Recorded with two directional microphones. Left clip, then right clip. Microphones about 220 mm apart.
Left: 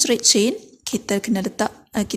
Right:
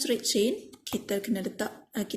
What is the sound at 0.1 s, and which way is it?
A woman's voice, 45° left (ahead or behind).